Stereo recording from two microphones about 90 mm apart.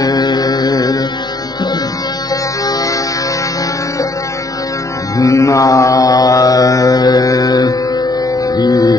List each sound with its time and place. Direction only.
0.0 s music: 50° left (ahead or behind)
5.1 s mantra: 35° left (ahead or behind)
8.5 s music: 45° left (ahead or behind)